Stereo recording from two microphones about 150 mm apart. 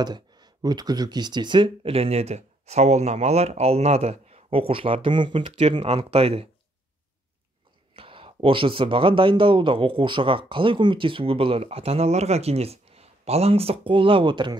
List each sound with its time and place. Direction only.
0.0 s speech: 30° right (ahead or behind)
7.9 s speech: 35° right (ahead or behind)